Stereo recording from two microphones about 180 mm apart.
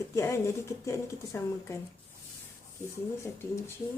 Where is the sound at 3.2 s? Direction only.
15° left (ahead or behind).